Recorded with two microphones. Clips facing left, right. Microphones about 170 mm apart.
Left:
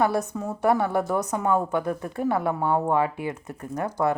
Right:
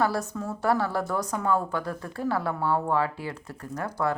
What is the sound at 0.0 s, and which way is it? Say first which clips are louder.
A woman's voice: left 3 dB; 20° left (ahead or behind).